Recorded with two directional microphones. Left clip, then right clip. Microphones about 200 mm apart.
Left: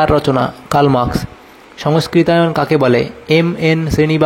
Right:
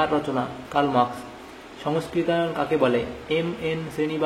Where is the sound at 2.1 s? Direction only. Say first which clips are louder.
Left 12 dB; 50° left (ahead or behind).